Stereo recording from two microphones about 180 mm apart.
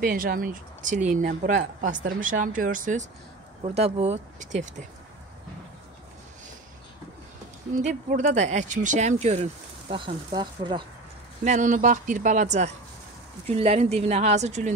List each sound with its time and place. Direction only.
0.1 s speech: 50° right (ahead or behind)
3.6 s speech: 35° right (ahead or behind)
7.8 s speech: 45° right (ahead or behind); by 10.8 s 25° right (ahead or behind)
11.4 s speech: 45° right (ahead or behind)